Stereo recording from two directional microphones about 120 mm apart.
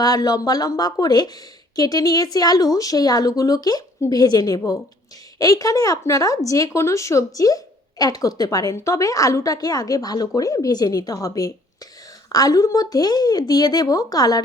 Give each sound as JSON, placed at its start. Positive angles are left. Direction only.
{"t": 0.0, "sound": "a woman's voice", "side_deg": 30}